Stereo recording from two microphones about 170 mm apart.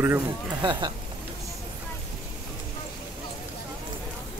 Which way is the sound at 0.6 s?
25° right (ahead or behind).